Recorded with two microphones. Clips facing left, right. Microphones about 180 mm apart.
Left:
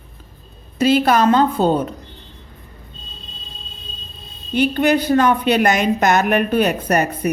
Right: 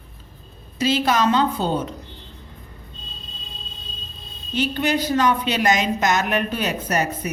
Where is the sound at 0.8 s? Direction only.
55° left (ahead or behind).